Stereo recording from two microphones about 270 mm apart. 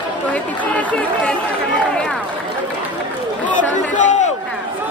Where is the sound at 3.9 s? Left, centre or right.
Left.